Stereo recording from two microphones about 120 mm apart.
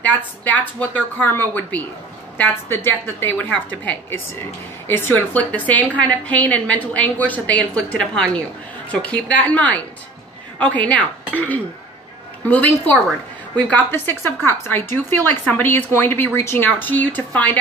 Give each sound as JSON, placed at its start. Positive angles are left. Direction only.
{"t": 0.0, "sound": "a woman's voice", "side_deg": 10}